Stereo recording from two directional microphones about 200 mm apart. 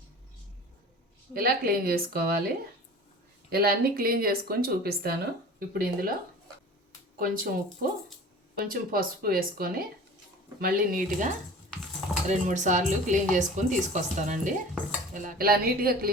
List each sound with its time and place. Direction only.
1.3 s speech: 50° right (ahead or behind)
3.5 s speech: 50° right (ahead or behind)
7.2 s speech: 45° right (ahead or behind)